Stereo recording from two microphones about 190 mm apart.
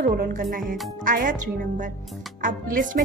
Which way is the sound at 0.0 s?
45° right (ahead or behind).